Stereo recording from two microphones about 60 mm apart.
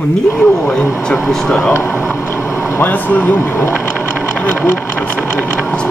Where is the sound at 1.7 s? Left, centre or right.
Left.